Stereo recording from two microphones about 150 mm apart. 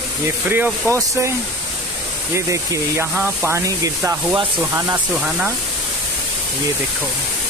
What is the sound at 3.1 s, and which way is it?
Speech, 10° right (ahead or behind).